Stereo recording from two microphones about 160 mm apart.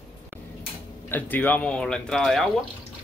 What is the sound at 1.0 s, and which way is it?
Speech, 10° left (ahead or behind).